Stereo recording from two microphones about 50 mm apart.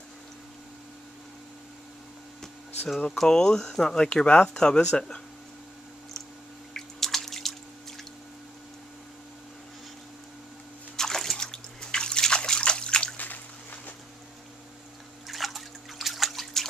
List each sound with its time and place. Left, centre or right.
3.2 s speech: centre
6.7 s drip: centre
11.0 s trickle: centre
13.2 s a sound: left
15.2 s liquid: centre